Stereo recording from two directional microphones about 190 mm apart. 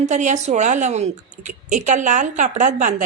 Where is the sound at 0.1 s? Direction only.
40° right (ahead or behind).